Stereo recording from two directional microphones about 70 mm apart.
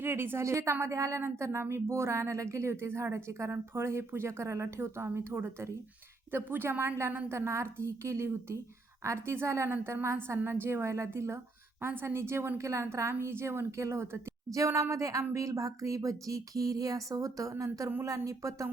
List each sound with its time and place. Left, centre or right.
0.0 s a woman's voice: right